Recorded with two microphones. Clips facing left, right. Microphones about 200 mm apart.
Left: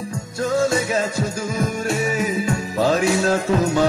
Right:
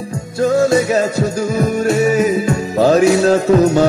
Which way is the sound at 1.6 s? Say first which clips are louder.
Right 8 dB; 40° right (ahead or behind).